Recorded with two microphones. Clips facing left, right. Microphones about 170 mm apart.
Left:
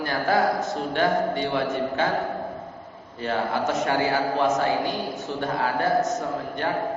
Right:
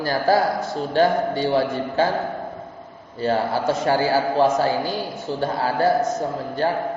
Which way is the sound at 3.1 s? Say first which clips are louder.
Right 4 dB; 35° right (ahead or behind).